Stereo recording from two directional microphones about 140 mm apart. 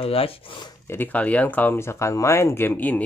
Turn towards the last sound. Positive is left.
turn(degrees=10)  # may be behind; listen again after turning